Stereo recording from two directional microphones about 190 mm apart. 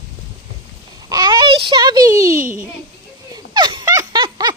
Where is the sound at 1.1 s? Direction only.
20° right (ahead or behind).